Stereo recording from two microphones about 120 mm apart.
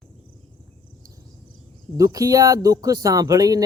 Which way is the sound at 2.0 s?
30° right (ahead or behind).